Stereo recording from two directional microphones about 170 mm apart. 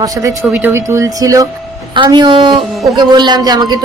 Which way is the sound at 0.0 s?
20° right (ahead or behind).